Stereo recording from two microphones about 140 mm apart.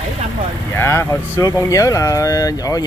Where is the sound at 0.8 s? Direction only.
15° left (ahead or behind).